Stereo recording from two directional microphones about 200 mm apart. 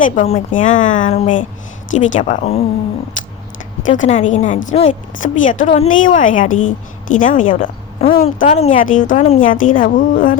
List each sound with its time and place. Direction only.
0.0 s a woman's voice: 40° left (ahead or behind)
3.8 s a woman's voice: 40° left (ahead or behind)
8.0 s a woman's voice: 30° left (ahead or behind); by 10.3 s 45° left (ahead or behind)